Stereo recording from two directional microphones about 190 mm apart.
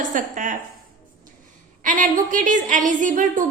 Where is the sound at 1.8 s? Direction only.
45° right (ahead or behind).